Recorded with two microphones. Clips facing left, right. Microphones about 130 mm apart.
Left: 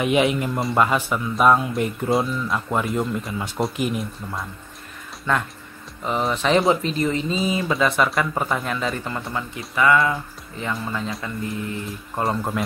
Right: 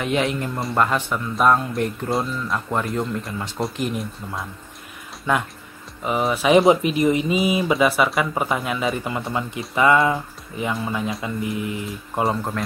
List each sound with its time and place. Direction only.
0.0 s speech: 10° left (ahead or behind)
5.3 s speech: 15° right (ahead or behind)
9.3 s speech: 20° right (ahead or behind)
12.2 s speech: centre (ahead or behind)